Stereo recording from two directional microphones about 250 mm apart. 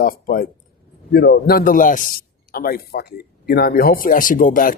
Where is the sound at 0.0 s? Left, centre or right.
Left.